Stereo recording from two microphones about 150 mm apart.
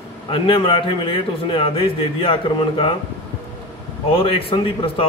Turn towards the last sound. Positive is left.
turn(degrees=35)  # may be behind; listen again after turning